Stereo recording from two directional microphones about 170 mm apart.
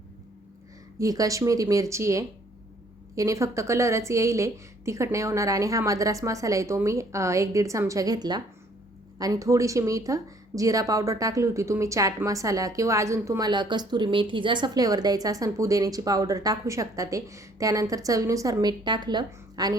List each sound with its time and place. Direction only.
0.9 s a woman's voice: 20° right (ahead or behind)